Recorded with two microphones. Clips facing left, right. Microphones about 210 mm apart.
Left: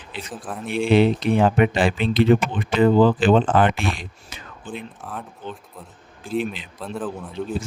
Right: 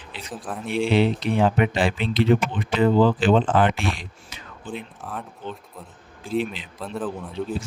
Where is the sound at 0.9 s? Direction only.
50° left (ahead or behind).